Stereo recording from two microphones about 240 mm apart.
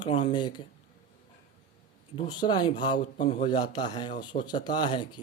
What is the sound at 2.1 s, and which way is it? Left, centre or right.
Speech, left.